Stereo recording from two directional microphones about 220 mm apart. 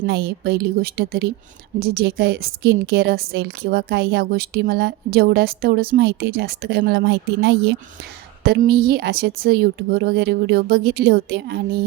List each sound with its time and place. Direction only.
0.0 s a woman's voice: 50° right (ahead or behind)